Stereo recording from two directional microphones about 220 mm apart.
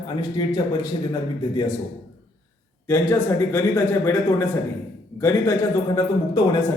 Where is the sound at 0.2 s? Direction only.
20° left (ahead or behind).